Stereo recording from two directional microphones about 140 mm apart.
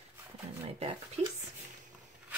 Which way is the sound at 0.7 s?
45° right (ahead or behind).